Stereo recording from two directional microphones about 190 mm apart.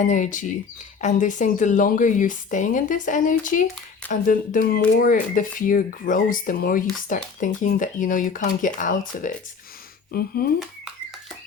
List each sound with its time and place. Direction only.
0.0 s speech: 40° left (ahead or behind)